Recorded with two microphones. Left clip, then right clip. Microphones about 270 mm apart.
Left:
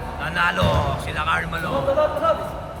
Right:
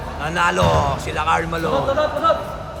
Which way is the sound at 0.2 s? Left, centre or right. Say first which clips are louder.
Right 3 dB; centre.